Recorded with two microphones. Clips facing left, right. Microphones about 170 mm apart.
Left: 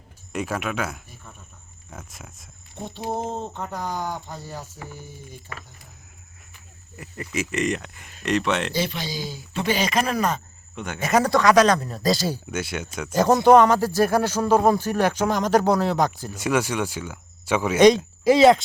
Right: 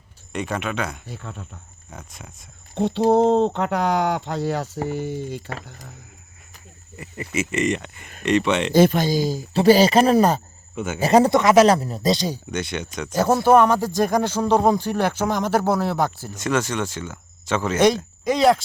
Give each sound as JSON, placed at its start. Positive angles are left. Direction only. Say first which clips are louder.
{"t": 0.3, "sound": "speech", "louder": "right 1 dB", "side_deg": 5}
{"t": 1.0, "sound": "speech", "louder": "right 11 dB", "side_deg": -75}
{"t": 1.9, "sound": "speech", "louder": "right 1 dB", "side_deg": 0}
{"t": 2.7, "sound": "speech", "louder": "right 12 dB", "side_deg": -80}
{"t": 6.9, "sound": "speech", "louder": "right 3 dB", "side_deg": 0}
{"t": 8.7, "sound": "speech", "louder": "right 11 dB", "side_deg": -50}
{"t": 10.8, "sound": "speech", "louder": "right 5 dB", "side_deg": -5}
{"t": 11.0, "sound": "speech", "louder": "right 3 dB", "side_deg": -30}
{"t": 12.5, "sound": "speech", "louder": "right 2 dB", "side_deg": 5}
{"t": 15.4, "sound": "speech", "louder": "left 2 dB", "side_deg": -10}
{"t": 15.9, "sound": "speech", "louder": "left 1 dB", "side_deg": 15}